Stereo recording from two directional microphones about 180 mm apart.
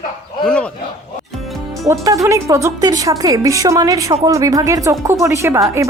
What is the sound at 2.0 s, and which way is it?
A woman's voice, 20° right (ahead or behind).